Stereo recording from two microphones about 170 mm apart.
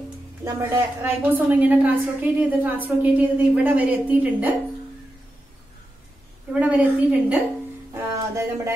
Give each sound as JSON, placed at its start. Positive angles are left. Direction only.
{"t": 0.6, "sound": "a woman's voice", "side_deg": -15}
{"t": 6.5, "sound": "a woman's voice", "side_deg": -10}
{"t": 7.9, "sound": "music", "side_deg": -15}